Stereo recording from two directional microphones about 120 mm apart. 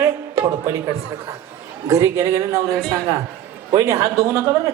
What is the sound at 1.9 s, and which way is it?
Speech, 25° right (ahead or behind).